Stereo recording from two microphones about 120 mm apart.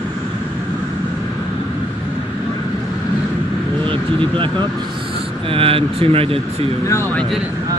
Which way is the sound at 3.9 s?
45° right (ahead or behind).